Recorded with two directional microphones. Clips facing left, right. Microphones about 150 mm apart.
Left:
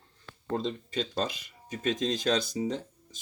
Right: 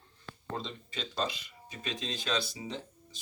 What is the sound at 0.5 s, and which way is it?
Speech, 40° left (ahead or behind).